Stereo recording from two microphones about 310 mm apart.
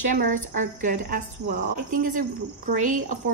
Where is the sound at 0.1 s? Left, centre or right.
Right.